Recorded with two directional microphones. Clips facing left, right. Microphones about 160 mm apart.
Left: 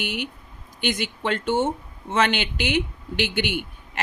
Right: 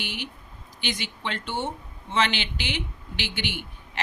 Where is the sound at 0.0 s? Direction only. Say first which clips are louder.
Left 6 dB; 50° left (ahead or behind).